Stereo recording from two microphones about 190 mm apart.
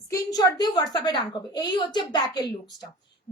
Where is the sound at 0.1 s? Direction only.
20° left (ahead or behind).